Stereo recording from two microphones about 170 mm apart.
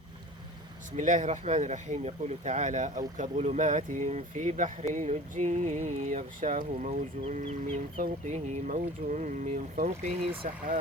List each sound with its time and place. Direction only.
0.9 s speech: 45° right (ahead or behind)